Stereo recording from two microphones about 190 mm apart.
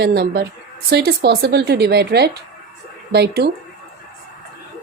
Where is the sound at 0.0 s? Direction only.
55° right (ahead or behind).